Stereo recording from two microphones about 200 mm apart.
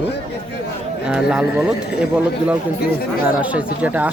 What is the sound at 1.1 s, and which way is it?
Speech, 5° right (ahead or behind).